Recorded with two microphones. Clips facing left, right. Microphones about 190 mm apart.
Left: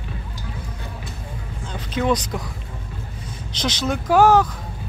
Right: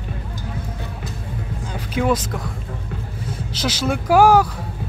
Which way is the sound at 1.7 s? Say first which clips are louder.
Right 1 dB; 10° right (ahead or behind).